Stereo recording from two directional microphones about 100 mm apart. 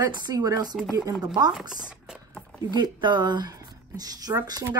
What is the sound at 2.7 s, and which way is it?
Speech, 50° right (ahead or behind).